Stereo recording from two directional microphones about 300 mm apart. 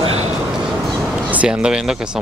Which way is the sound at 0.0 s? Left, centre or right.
Centre.